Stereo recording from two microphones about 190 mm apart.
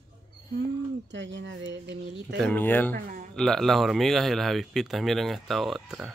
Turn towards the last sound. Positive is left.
turn(degrees=-5)  # may be behind; listen again after turning